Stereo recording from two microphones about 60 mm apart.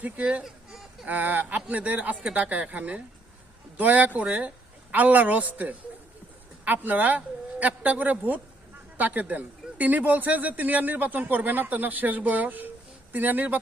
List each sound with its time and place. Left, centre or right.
0.0 s speech: right